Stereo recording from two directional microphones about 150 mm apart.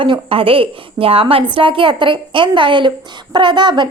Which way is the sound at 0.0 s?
35° right (ahead or behind).